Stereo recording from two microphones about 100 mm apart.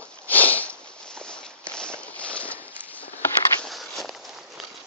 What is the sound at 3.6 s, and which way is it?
Walk, centre (ahead or behind).